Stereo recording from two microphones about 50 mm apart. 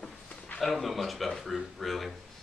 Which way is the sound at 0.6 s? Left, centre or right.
Centre.